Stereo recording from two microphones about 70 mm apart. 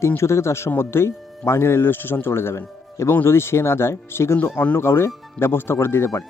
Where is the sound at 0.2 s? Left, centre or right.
Left.